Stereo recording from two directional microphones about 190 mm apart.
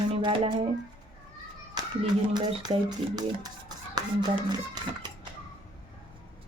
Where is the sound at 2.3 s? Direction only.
20° right (ahead or behind).